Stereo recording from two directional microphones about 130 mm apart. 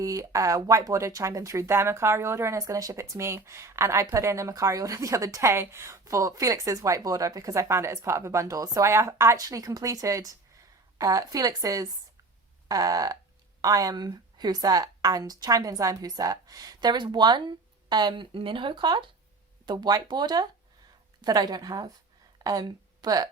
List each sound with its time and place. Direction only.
0.0 s a woman's voice: 25° right (ahead or behind)